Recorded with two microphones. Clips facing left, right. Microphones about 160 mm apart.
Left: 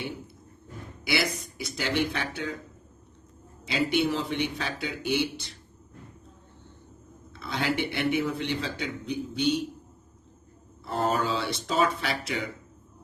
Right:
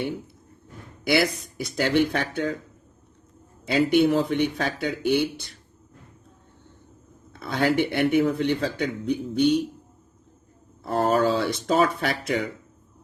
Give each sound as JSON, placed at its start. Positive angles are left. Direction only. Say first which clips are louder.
{"t": 1.0, "sound": "a man's voice", "louder": "right 7 dB", "side_deg": -50}
{"t": 3.7, "sound": "a man's voice", "louder": "right 7 dB", "side_deg": -50}
{"t": 7.3, "sound": "a man's voice", "louder": "right 6 dB", "side_deg": -50}
{"t": 10.8, "sound": "a man's voice", "louder": "right 6 dB", "side_deg": -55}